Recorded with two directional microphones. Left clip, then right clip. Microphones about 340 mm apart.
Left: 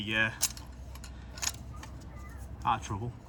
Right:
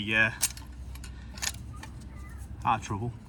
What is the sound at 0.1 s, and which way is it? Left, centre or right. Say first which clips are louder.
Speech: right 4 dB; centre.